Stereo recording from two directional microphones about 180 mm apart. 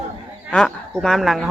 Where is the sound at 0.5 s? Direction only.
5° left (ahead or behind).